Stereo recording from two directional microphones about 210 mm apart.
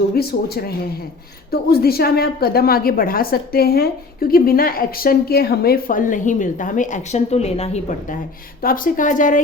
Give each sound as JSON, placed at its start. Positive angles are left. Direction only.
{"t": 0.2, "sound": "a woman's voice", "side_deg": 50}